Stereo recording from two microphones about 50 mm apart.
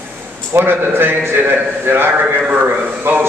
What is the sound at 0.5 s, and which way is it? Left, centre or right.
A man's voice, right.